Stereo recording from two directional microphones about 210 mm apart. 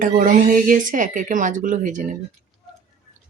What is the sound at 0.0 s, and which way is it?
Speech, 40° right (ahead or behind).